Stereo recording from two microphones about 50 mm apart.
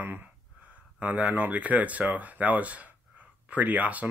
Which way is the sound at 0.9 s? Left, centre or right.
Right.